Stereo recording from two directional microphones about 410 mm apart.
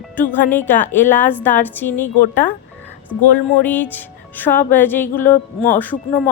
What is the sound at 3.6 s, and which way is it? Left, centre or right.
A woman's voice, centre.